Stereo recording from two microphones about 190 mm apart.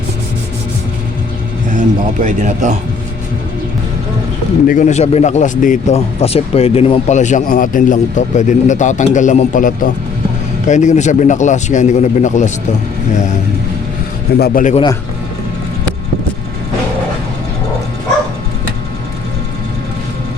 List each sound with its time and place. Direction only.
2.2 s a man's voice: 40° right (ahead or behind)
4.6 s speech: 45° left (ahead or behind)
14.3 s a man's voice: 50° left (ahead or behind)